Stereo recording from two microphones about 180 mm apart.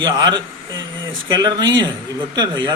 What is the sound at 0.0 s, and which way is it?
A man's voice, 25° right (ahead or behind).